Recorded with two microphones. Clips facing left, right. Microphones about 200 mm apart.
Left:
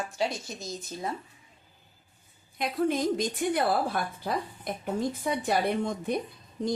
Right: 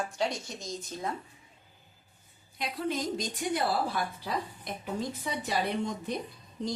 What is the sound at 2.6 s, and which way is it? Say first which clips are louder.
A woman's voice: left 6 dB; 55° left (ahead or behind).